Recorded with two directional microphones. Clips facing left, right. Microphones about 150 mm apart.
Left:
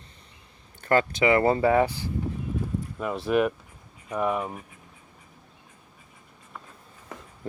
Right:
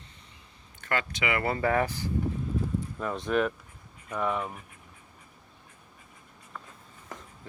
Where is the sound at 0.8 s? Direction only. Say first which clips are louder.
Left 9 dB; 40° left (ahead or behind); by 1.9 s 20° left (ahead or behind).